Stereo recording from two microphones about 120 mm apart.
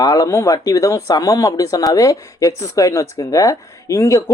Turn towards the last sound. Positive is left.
turn(degrees=25)  # may be behind; listen again after turning